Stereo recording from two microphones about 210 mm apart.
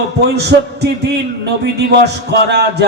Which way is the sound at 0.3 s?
50° right (ahead or behind).